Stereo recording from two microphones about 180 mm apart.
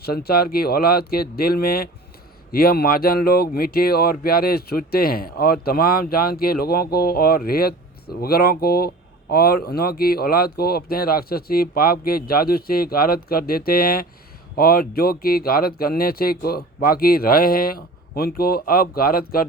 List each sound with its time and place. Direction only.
0.0 s speech: 60° left (ahead or behind)